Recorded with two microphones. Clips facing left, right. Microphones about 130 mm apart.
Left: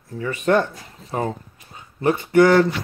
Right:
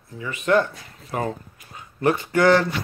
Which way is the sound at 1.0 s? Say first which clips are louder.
Left 2 dB; 25° left (ahead or behind).